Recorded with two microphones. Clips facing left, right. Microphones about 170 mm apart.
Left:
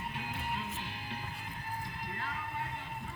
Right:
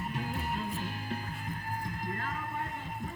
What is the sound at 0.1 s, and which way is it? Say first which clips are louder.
Music: right 4 dB; 45° right (ahead or behind).